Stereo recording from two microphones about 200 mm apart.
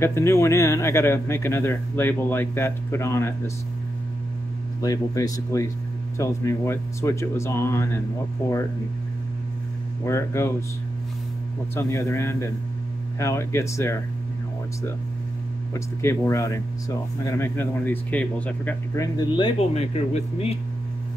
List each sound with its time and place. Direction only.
0.0 s speech: 15° left (ahead or behind)
4.8 s speech: 15° left (ahead or behind)
10.0 s speech: 15° left (ahead or behind)
11.7 s speech: 15° left (ahead or behind)
15.7 s speech: 15° left (ahead or behind)
19.1 s speech: 25° left (ahead or behind)